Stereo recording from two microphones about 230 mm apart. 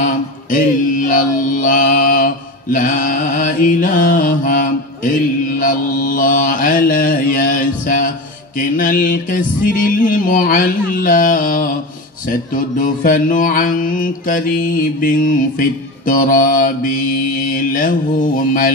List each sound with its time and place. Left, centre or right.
0.0 s mantra: left